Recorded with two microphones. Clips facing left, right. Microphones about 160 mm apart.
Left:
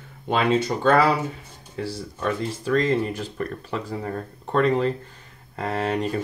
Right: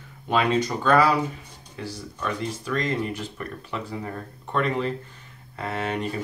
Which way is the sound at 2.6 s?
35° left (ahead or behind).